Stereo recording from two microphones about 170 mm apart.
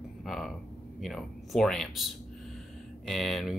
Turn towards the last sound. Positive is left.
turn(degrees=0)  # may be behind; listen again after turning